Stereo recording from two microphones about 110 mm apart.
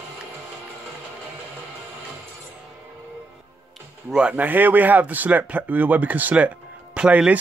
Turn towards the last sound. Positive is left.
turn(degrees=-10)  # may be behind; listen again after turning